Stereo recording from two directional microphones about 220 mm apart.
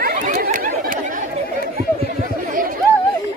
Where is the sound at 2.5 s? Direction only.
40° right (ahead or behind).